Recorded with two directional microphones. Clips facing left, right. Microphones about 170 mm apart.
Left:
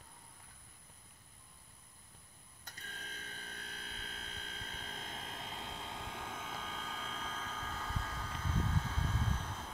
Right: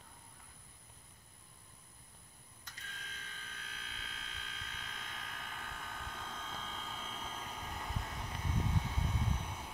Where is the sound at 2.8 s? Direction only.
40° left (ahead or behind).